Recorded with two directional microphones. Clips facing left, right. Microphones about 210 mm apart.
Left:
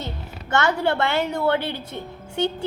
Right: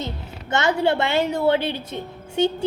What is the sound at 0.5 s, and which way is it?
A woman's voice, 20° right (ahead or behind).